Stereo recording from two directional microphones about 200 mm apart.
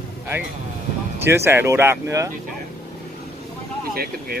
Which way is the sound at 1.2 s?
10° right (ahead or behind).